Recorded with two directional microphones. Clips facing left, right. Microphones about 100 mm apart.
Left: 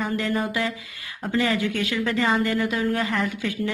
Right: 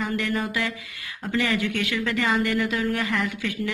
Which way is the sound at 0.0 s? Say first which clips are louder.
Left 1 dB; 30° left (ahead or behind).